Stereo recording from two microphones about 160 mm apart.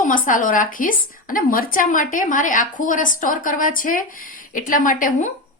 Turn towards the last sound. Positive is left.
turn(degrees=55)  # may be behind; listen again after turning